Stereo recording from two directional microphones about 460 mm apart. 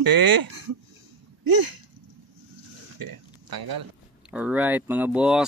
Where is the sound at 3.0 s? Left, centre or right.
Right.